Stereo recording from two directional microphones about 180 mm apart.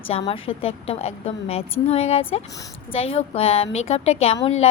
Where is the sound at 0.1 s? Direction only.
30° left (ahead or behind).